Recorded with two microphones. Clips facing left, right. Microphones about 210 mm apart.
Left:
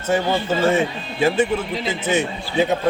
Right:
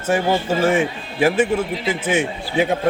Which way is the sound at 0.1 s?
10° right (ahead or behind).